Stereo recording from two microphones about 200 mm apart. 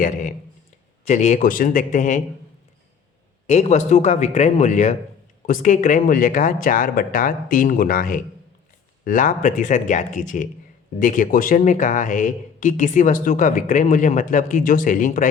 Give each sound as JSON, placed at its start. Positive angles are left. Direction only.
{"t": 0.0, "sound": "speech", "side_deg": 40}
{"t": 3.4, "sound": "speech", "side_deg": 35}